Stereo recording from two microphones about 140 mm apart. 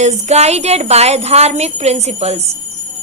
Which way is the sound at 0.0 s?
50° right (ahead or behind).